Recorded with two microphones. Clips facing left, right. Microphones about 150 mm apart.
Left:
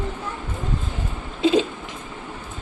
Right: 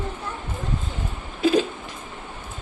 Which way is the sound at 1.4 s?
25° left (ahead or behind).